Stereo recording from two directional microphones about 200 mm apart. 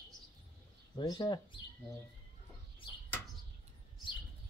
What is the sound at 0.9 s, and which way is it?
Speech, 20° left (ahead or behind).